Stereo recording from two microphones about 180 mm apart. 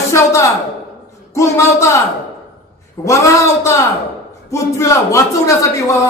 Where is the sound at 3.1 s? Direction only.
15° left (ahead or behind).